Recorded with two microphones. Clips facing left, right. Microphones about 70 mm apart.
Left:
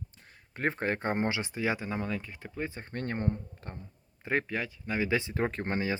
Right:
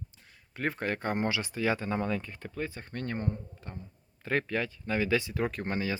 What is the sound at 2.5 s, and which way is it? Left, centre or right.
Speech, left.